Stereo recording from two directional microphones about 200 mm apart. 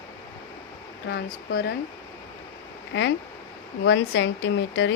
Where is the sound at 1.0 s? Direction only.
55° left (ahead or behind).